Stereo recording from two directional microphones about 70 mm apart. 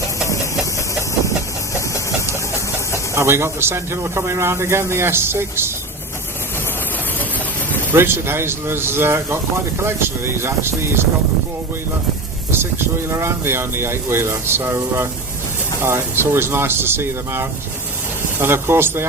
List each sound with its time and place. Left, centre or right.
3.2 s speech: right
7.2 s vehicle: left
7.9 s speech: right
13.1 s speech: right